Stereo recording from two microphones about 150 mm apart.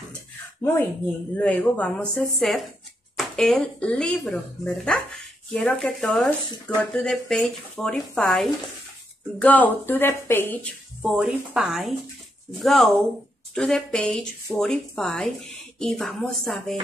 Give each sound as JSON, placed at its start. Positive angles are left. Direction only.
{"t": 0.6, "sound": "a woman's voice", "side_deg": 15}
{"t": 11.0, "sound": "a woman's voice", "side_deg": -5}